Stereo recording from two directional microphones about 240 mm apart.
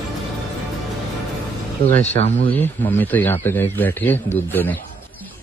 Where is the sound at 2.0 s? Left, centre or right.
Left.